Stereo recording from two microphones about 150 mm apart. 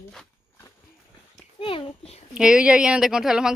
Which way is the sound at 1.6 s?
40° left (ahead or behind).